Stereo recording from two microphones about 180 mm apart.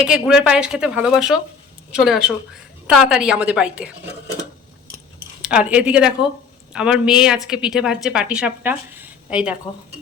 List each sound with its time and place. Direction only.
0.0 s a woman's voice: 5° right (ahead or behind)
5.4 s a woman's voice: 5° right (ahead or behind)